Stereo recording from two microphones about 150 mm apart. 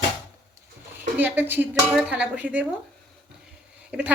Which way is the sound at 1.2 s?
10° right (ahead or behind).